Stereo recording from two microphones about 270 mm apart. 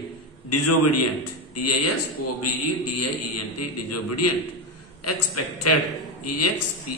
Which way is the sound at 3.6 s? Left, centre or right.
Left.